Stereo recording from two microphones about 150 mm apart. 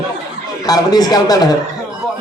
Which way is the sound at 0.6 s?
25° left (ahead or behind).